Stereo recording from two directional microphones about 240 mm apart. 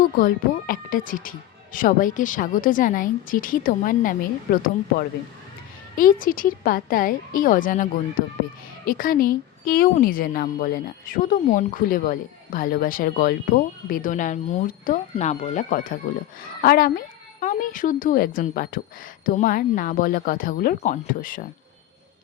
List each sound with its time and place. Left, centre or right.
0.0 s speech: left
8.9 s speech: left